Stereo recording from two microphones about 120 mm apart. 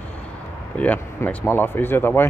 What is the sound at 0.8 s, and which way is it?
Speech, 15° left (ahead or behind).